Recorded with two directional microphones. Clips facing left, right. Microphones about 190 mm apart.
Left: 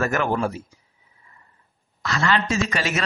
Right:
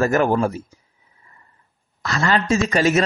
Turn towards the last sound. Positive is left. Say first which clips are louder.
# right 7 dB
turn(degrees=-40)  # may be behind; listen again after turning